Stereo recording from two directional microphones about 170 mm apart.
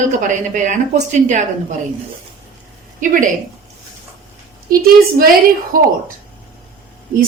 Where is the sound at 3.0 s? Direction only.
50° right (ahead or behind).